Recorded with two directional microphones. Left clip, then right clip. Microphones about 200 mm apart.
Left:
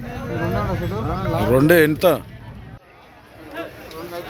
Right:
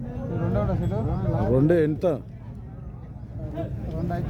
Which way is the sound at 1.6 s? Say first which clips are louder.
Left 9 dB; 5° left (ahead or behind).